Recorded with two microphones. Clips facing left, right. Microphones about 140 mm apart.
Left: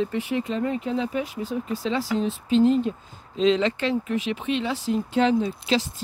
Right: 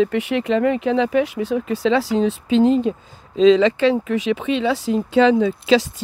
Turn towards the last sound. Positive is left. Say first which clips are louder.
# right 7 dB
turn(degrees=-90)